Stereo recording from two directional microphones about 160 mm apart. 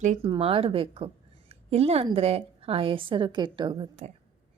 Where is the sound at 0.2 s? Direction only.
35° right (ahead or behind).